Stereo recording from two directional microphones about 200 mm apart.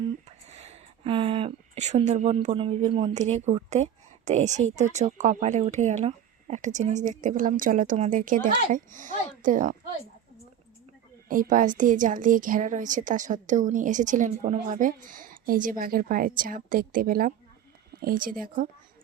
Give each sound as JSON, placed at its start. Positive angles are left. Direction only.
{"t": 0.3, "sound": "a woman's voice", "side_deg": -30}
{"t": 11.3, "sound": "a woman's voice", "side_deg": -40}